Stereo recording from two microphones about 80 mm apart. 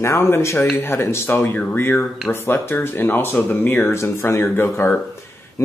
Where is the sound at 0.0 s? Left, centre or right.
Left.